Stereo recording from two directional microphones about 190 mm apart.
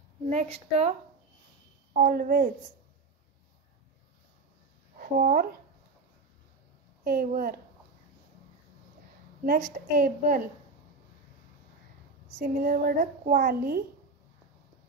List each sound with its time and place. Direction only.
0.3 s a woman's voice: 35° right (ahead or behind)
2.0 s a child's voice: 50° right (ahead or behind)
4.9 s speech: 45° right (ahead or behind)
7.1 s a child's voice: 50° right (ahead or behind)
9.4 s a child's voice: 50° right (ahead or behind)
12.4 s a child's voice: 50° right (ahead or behind)